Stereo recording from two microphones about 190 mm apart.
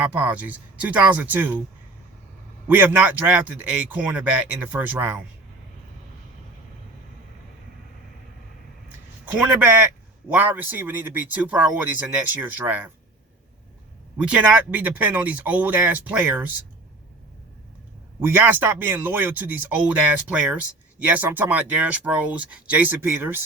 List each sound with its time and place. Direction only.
0.0 s speech: 5° right (ahead or behind)
2.6 s speech: 10° right (ahead or behind)
9.2 s speech: 5° right (ahead or behind)
14.2 s speech: 5° right (ahead or behind)
18.3 s speech: 10° right (ahead or behind)
21.1 s speech: 10° right (ahead or behind)